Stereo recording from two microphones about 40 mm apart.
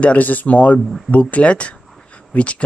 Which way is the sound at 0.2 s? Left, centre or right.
Left.